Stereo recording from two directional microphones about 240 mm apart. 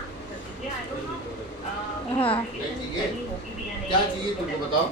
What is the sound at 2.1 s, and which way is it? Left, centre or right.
Speech, left.